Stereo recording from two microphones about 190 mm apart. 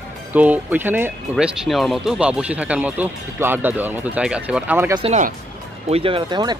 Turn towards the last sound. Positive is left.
turn(degrees=-20)  # may be behind; listen again after turning